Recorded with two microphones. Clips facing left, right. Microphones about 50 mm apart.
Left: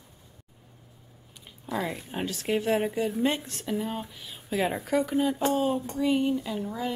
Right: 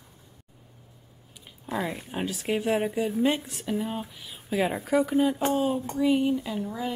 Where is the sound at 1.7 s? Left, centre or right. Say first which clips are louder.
Right 1 dB; centre.